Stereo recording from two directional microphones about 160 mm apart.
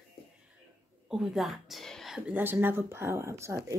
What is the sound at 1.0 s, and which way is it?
Speech, centre (ahead or behind).